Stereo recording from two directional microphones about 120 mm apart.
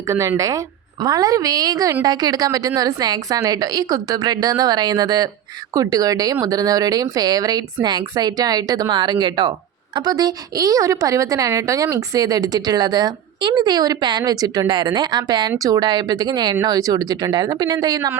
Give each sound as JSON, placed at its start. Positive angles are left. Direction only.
{"t": 0.1, "sound": "a woman's voice", "side_deg": -25}